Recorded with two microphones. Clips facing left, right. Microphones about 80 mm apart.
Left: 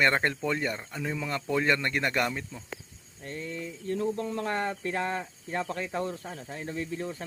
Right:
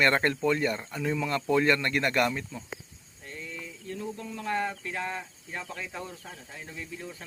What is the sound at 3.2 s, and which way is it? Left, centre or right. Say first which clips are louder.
Speech: left 5 dB; left.